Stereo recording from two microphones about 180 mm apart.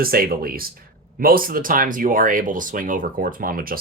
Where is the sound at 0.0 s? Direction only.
55° right (ahead or behind).